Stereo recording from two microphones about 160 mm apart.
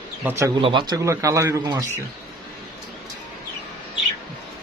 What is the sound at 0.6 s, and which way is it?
Speech, 30° right (ahead or behind).